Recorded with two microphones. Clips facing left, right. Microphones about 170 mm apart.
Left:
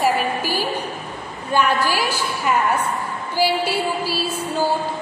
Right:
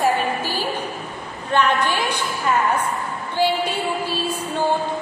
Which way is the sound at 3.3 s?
5° left (ahead or behind).